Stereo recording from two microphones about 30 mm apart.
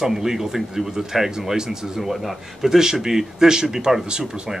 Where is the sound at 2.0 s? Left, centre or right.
Centre.